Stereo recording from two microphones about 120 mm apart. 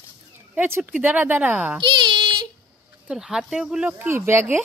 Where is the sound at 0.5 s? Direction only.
15° right (ahead or behind).